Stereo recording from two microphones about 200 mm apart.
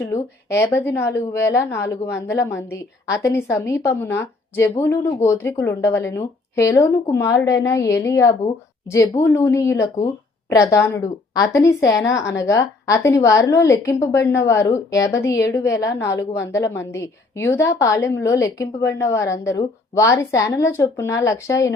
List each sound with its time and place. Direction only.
0.1 s a woman's voice: 15° left (ahead or behind)